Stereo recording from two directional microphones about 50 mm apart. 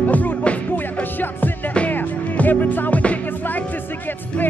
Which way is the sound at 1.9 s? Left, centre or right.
Left.